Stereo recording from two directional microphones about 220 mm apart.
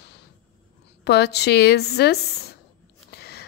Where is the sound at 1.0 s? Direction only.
50° left (ahead or behind).